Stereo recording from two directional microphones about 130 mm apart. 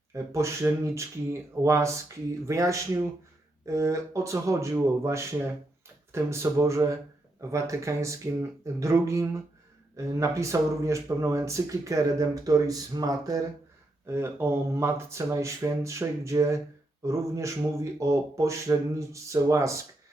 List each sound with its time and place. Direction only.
0.1 s speech: 20° right (ahead or behind)
14.1 s speech: 20° right (ahead or behind)